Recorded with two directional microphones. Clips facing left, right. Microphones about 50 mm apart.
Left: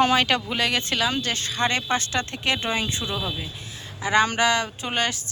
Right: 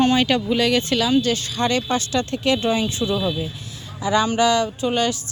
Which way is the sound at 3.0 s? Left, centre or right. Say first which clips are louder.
Right 7 dB; left.